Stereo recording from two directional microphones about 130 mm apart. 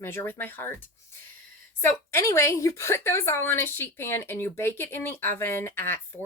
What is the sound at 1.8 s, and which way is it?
A woman's voice, 20° left (ahead or behind).